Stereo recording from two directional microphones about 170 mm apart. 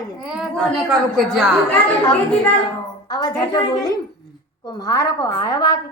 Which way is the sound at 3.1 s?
25° left (ahead or behind).